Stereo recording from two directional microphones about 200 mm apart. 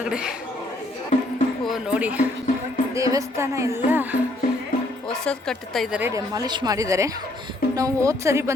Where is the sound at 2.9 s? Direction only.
15° right (ahead or behind).